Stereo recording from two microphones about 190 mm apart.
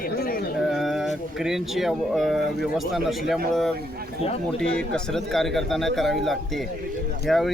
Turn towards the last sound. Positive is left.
turn(degrees=0)  # may be behind; listen again after turning